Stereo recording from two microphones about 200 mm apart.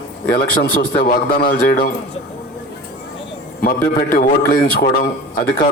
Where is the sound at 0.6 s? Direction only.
45° left (ahead or behind).